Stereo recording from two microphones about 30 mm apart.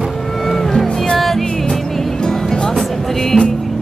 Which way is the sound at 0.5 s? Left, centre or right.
Centre.